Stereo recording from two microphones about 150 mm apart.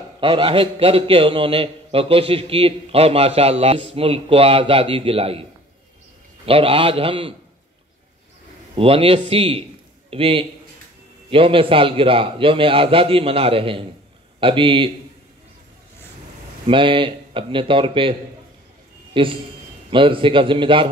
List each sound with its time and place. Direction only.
0.2 s a man's voice: 35° right (ahead or behind)
8.7 s a man's voice: 40° right (ahead or behind)
16.6 s a man's voice: 35° right (ahead or behind)
19.1 s a man's voice: 35° right (ahead or behind)